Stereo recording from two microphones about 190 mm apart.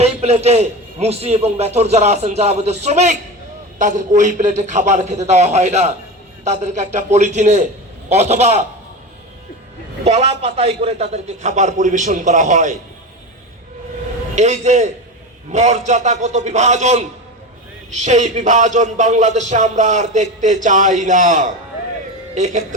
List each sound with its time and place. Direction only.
0.0 s speech: 35° right (ahead or behind)
10.0 s speech: 35° right (ahead or behind)
14.3 s speech: 35° right (ahead or behind)